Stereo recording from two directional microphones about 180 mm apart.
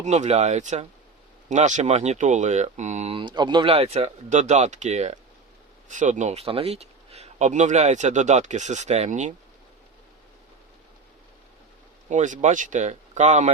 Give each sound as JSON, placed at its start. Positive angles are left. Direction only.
{"t": 0.0, "sound": "speech", "side_deg": -40}
{"t": 12.0, "sound": "speech", "side_deg": -45}